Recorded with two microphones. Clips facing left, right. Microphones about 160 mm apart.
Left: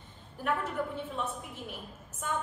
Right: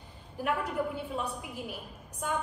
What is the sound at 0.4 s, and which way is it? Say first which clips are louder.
Speech: right 1 dB; 5° right (ahead or behind).